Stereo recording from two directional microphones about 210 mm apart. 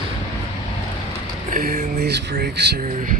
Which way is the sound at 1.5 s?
40° right (ahead or behind).